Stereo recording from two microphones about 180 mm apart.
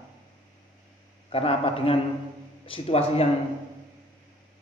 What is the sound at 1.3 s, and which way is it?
Speech, 30° left (ahead or behind).